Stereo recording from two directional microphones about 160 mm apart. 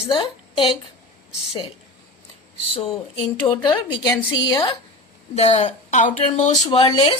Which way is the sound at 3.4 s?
30° left (ahead or behind).